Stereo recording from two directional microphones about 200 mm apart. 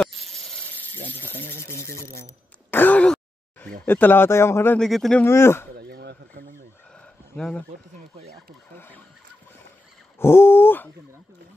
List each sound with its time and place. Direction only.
0.0 s snake: centre (ahead or behind)
1.1 s speech: 10° left (ahead or behind)
2.7 s throat clearing: 10° left (ahead or behind)
3.8 s speech: 10° left (ahead or behind)
5.2 s speech: 10° left (ahead or behind)
5.8 s a sound: 55° right (ahead or behind)
7.3 s speech: 5° left (ahead or behind)
8.7 s neigh: 10° left (ahead or behind)
10.1 s speech: 10° left (ahead or behind)